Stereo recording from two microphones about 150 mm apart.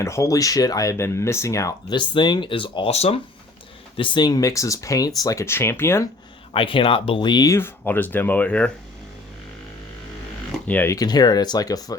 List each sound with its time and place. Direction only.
0.0 s speech: 20° left (ahead or behind)
6.5 s speech: 35° left (ahead or behind); by 8.7 s 10° left (ahead or behind)
10.7 s speech: 10° left (ahead or behind)
10.9 s speech: 25° left (ahead or behind)